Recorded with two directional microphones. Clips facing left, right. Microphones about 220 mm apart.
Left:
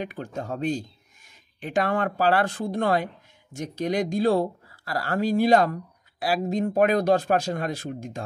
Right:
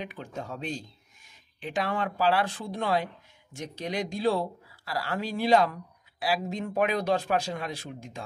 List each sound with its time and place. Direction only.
0.0 s speech: 45° left (ahead or behind)